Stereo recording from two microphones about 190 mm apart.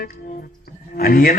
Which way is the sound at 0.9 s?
50° left (ahead or behind).